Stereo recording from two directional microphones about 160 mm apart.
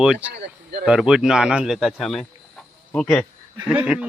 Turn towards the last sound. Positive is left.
turn(degrees=-5)  # may be behind; listen again after turning